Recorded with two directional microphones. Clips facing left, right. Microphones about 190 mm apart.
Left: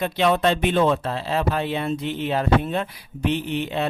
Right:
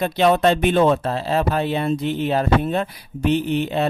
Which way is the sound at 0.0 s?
40° right (ahead or behind).